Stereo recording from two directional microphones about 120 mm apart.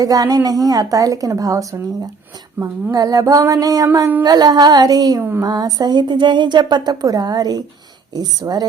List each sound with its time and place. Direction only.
0.0 s a woman's voice: 30° right (ahead or behind)
2.6 s speech: 15° right (ahead or behind)
2.9 s a woman's voice: 30° right (ahead or behind)
4.2 s a sound: 35° right (ahead or behind)